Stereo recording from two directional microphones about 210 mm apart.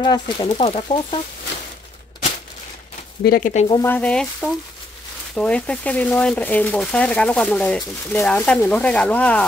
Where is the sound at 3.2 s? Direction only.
40° left (ahead or behind).